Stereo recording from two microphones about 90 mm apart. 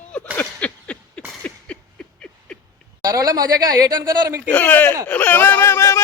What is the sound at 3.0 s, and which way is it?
Speech, 45° right (ahead or behind).